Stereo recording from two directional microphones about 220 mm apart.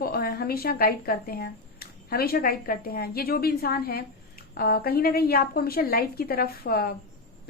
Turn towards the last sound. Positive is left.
turn(degrees=45)  # may be behind; listen again after turning